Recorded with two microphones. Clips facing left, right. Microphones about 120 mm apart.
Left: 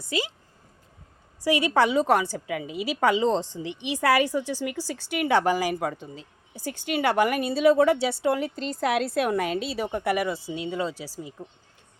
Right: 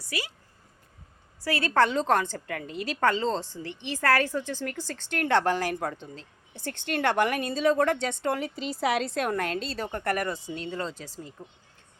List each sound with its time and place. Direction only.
0.1 s speech: 25° left (ahead or behind)
1.5 s a woman's voice: 15° left (ahead or behind)